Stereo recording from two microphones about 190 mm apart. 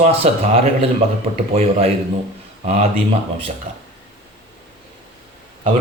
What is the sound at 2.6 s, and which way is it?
Speech, 35° right (ahead or behind).